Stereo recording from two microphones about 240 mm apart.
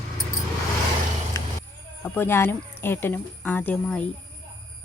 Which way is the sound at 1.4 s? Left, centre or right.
Centre.